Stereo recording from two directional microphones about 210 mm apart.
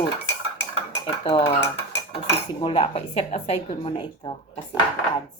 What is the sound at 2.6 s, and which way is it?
Speech, 25° left (ahead or behind).